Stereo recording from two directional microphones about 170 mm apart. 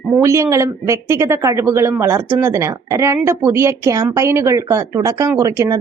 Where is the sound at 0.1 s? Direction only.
15° right (ahead or behind).